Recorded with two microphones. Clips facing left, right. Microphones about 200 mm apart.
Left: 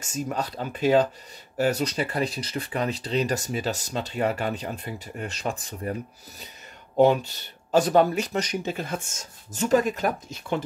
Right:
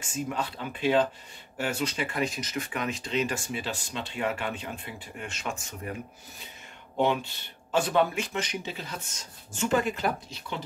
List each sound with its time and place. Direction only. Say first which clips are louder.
0.0 s speech: left 3 dB; 40° left (ahead or behind)
7.0 s speech: left 7 dB; 40° left (ahead or behind)